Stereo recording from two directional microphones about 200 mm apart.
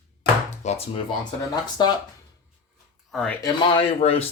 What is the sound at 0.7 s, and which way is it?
Speech, 30° left (ahead or behind).